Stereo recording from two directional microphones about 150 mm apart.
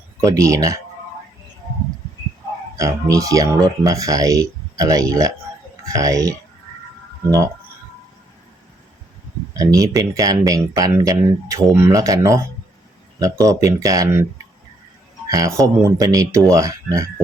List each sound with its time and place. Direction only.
0.2 s speech: 20° right (ahead or behind)
2.7 s speech: 20° right (ahead or behind)
9.6 s speech: 25° right (ahead or behind)
15.3 s speech: 20° right (ahead or behind)